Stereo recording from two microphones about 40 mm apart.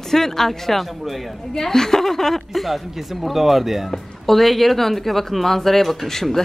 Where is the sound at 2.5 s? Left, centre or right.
Centre.